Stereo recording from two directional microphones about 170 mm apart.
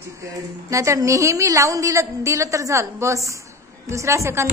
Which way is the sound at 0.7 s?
20° right (ahead or behind).